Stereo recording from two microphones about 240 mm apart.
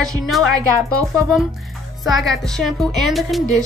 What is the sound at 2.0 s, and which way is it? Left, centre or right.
A woman's voice, centre.